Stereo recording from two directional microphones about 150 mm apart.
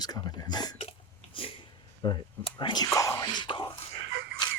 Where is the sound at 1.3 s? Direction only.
35° left (ahead or behind).